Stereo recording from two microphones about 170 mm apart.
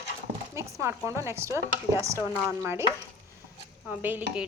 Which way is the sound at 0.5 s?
15° right (ahead or behind).